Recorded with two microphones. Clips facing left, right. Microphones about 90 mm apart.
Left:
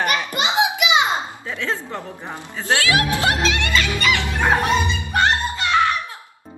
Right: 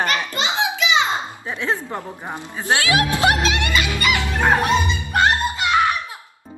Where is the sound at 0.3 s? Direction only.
20° left (ahead or behind).